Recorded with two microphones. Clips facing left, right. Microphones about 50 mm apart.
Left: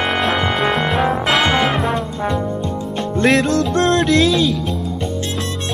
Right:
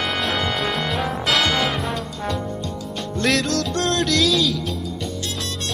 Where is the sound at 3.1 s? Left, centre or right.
Left.